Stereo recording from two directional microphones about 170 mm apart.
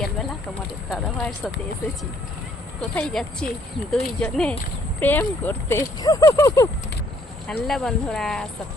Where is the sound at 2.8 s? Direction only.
5° left (ahead or behind).